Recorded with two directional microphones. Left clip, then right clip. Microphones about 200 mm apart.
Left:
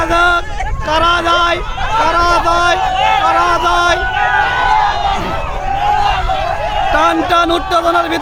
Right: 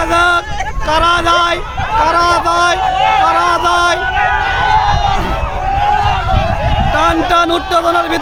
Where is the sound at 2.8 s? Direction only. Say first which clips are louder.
Right 1 dB; 40° left (ahead or behind).